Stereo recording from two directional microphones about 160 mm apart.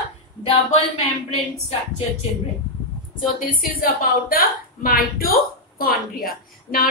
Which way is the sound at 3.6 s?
65° left (ahead or behind).